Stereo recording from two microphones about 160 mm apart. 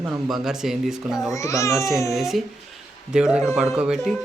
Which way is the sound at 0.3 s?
Centre (ahead or behind).